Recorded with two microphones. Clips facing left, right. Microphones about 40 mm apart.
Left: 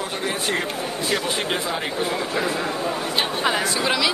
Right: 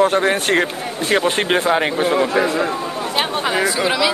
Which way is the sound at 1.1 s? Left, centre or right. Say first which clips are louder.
Right 9 dB; right.